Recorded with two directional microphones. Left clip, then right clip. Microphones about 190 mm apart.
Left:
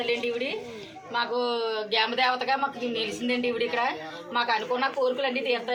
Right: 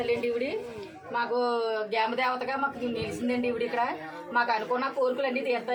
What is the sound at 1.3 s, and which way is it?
Speech, 10° right (ahead or behind).